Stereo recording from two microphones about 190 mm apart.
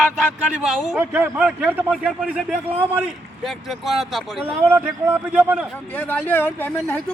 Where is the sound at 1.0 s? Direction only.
10° right (ahead or behind).